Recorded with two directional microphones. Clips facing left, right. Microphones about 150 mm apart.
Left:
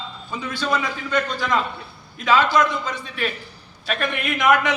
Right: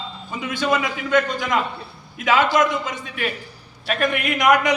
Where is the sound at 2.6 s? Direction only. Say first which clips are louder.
Right 1 dB; 50° right (ahead or behind).